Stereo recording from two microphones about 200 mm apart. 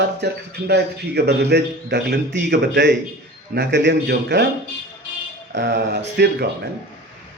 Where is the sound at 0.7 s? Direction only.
55° right (ahead or behind).